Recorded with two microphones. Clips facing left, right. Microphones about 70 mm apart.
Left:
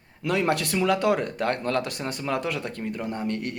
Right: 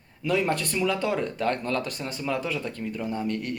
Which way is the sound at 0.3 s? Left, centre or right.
Left.